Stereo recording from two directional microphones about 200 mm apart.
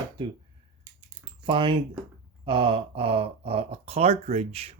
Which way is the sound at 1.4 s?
25° right (ahead or behind).